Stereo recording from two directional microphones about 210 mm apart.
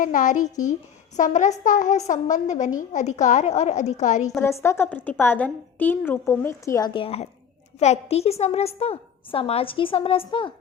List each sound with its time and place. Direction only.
0.0 s a woman's voice: 40° left (ahead or behind)
4.4 s a woman's voice: 15° left (ahead or behind)